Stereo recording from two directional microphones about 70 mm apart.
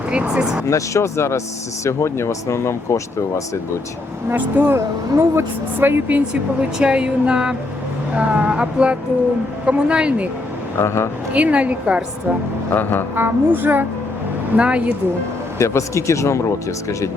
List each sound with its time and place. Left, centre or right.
0.1 s speech: centre
0.7 s speech: left
4.3 s speech: right
10.8 s speech: left
11.3 s a woman's voice: centre
12.7 s speech: left
13.1 s a woman's voice: right
15.5 s speech: left